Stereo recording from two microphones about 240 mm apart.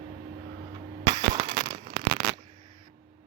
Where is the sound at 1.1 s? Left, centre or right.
Centre.